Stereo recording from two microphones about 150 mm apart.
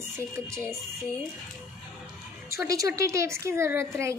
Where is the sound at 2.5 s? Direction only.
20° right (ahead or behind).